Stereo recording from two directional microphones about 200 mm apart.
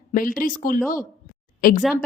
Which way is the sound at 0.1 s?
45° left (ahead or behind).